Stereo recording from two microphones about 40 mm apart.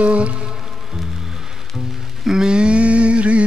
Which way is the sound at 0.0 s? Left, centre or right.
Right.